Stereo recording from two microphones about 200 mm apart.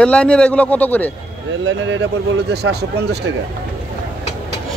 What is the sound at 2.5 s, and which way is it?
Speech, 55° right (ahead or behind).